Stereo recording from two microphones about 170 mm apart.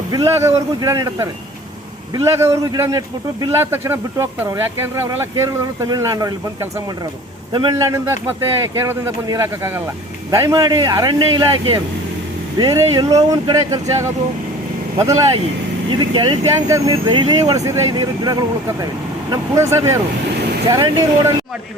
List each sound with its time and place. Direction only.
0.1 s speech: 20° right (ahead or behind)
16.6 s speech: 15° right (ahead or behind)